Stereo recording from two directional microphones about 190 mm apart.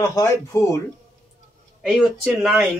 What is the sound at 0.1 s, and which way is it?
Speech, 15° left (ahead or behind).